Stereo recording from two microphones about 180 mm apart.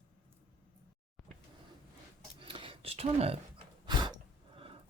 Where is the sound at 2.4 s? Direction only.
30° right (ahead or behind).